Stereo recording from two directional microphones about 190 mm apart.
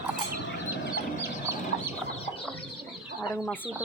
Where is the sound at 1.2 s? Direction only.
15° right (ahead or behind).